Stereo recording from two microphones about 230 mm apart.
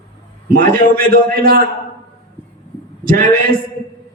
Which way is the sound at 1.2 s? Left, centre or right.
Right.